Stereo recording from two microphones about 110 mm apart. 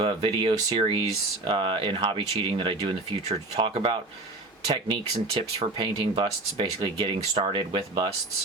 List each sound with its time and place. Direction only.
0.0 s speech: 50° right (ahead or behind)